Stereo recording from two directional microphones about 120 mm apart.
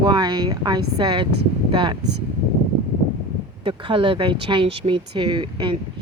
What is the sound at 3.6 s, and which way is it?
Speech, 45° right (ahead or behind).